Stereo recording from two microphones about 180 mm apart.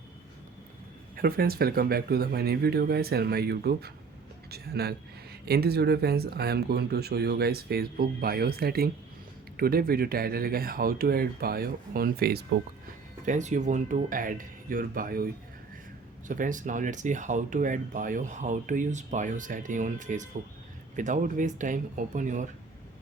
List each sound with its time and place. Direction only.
1.1 s speech: 55° right (ahead or behind)
13.2 s speech: 45° right (ahead or behind)